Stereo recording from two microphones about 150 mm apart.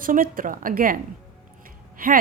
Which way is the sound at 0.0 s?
70° right (ahead or behind).